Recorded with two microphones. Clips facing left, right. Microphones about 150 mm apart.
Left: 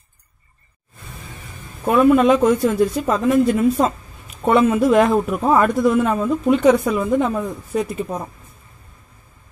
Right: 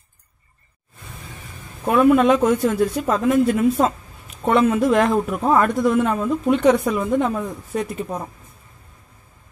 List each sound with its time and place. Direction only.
1.9 s a man's voice: centre (ahead or behind)